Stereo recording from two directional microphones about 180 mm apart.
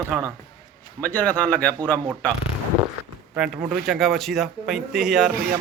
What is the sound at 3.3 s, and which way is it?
Speech, 5° right (ahead or behind).